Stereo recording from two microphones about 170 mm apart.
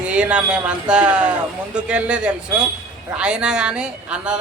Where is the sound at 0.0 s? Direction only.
5° right (ahead or behind).